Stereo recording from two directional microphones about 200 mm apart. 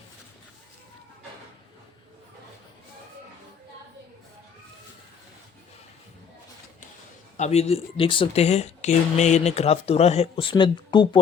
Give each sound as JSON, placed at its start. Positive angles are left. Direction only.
{"t": 7.3, "sound": "speech", "side_deg": 35}